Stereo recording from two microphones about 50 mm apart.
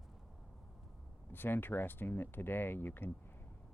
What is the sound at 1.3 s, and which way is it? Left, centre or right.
Speech, left.